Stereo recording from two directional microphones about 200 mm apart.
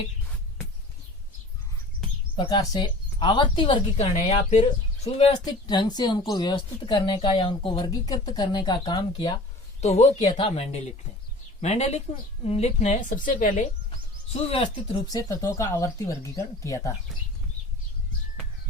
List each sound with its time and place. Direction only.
2.3 s speech: 25° left (ahead or behind)
9.8 s a woman's voice: 35° left (ahead or behind)
14.3 s speech: 30° left (ahead or behind)
15.0 s speech: 15° left (ahead or behind)